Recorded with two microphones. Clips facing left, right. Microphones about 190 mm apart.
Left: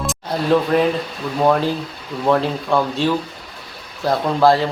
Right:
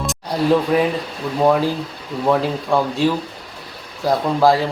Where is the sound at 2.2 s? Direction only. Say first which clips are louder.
Even; 5° right (ahead or behind).